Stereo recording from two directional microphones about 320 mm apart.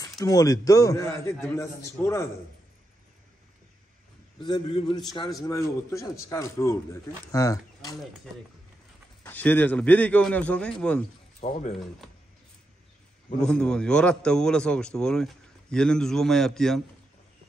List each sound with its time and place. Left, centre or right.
0.1 s a man's voice: centre
4.4 s a man's voice: centre
9.2 s a man's voice: centre
11.4 s speech: centre
13.4 s a man's voice: centre